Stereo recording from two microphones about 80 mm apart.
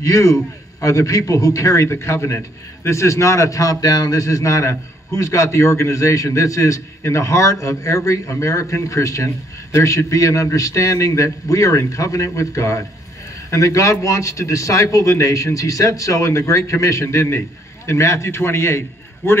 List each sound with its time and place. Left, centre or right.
0.0 s a man's voice: left